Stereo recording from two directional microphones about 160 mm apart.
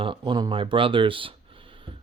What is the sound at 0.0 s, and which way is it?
Speech, 30° right (ahead or behind).